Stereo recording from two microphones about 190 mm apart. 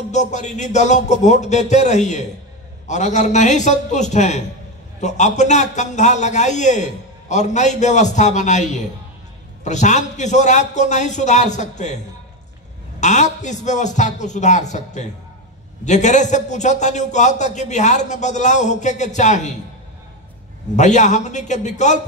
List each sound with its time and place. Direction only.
0.1 s a man's voice: 40° left (ahead or behind)
13.0 s a man's voice: 40° left (ahead or behind)
20.7 s a man's voice: 40° left (ahead or behind)